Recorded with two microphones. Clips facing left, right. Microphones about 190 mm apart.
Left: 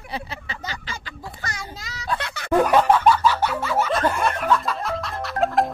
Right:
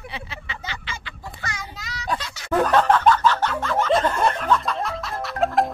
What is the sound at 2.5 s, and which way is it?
Music, 10° left (ahead or behind).